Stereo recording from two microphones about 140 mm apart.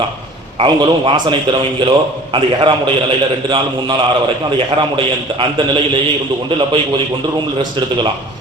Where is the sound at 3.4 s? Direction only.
35° right (ahead or behind).